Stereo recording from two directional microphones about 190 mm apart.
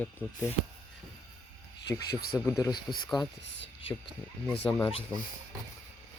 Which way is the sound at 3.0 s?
Centre (ahead or behind).